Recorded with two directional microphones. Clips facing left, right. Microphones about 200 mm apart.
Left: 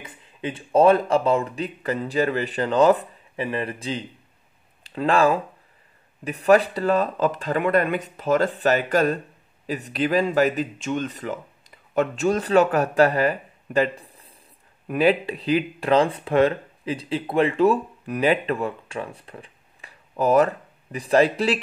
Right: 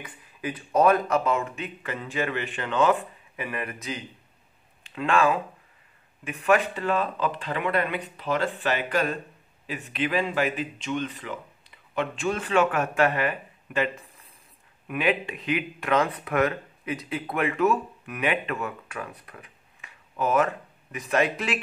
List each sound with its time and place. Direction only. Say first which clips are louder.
0.0 s speech: left 3 dB; 25° left (ahead or behind)